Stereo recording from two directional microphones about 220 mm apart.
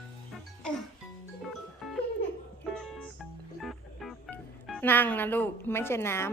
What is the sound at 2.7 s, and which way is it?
Music, 5° left (ahead or behind).